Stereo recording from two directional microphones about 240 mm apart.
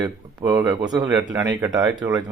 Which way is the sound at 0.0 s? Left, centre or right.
Centre.